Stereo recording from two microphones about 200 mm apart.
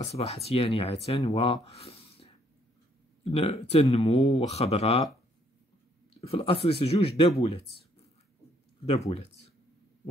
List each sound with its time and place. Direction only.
0.0 s speech: 30° left (ahead or behind)
6.2 s speech: 30° left (ahead or behind)
8.8 s speech: 30° left (ahead or behind)